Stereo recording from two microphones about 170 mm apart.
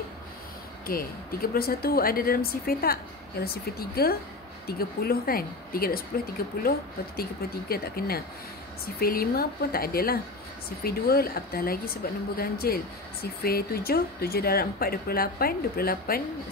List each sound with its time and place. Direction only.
0.8 s speech: 60° left (ahead or behind)